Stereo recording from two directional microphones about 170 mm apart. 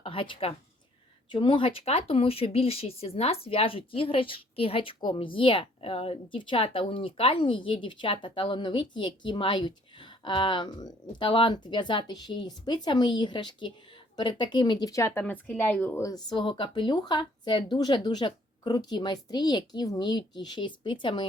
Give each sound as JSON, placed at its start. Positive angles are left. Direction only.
{"t": 0.0, "sound": "a woman's voice", "side_deg": 30}